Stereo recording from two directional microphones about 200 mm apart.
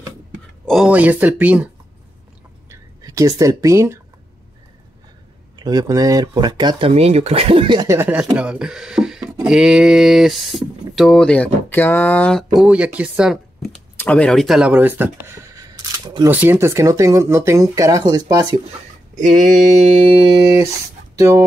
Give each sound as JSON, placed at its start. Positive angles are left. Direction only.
{"t": 0.7, "sound": "speech", "side_deg": -5}
{"t": 2.7, "sound": "speech", "side_deg": -15}
{"t": 5.6, "sound": "speech", "side_deg": -20}
{"t": 19.1, "sound": "mantra", "side_deg": -40}
{"t": 21.2, "sound": "speech", "side_deg": -15}